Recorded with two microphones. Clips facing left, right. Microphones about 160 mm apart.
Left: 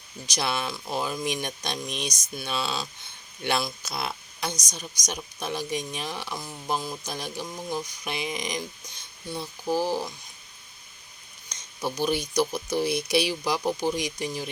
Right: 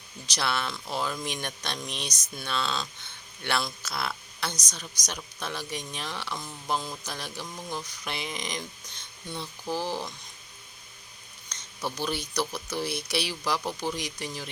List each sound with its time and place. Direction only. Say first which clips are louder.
0.3 s speech: left 1 dB; 15° left (ahead or behind)
11.4 s speech: left 3 dB; 15° left (ahead or behind)